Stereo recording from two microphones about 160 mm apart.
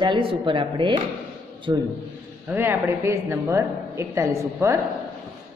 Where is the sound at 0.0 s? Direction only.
35° right (ahead or behind).